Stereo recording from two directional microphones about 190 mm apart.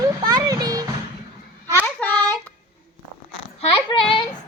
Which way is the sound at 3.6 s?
30° left (ahead or behind).